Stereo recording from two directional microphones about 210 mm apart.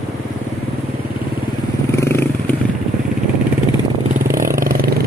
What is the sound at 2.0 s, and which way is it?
Vehicle, 15° left (ahead or behind).